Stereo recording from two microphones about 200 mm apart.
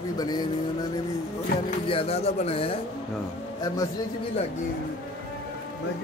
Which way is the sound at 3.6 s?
20° left (ahead or behind).